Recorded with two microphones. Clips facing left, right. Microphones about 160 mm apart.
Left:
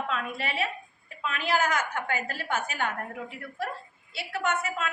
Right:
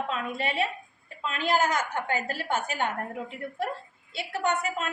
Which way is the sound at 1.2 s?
30° right (ahead or behind).